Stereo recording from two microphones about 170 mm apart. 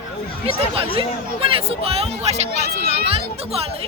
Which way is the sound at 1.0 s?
35° right (ahead or behind).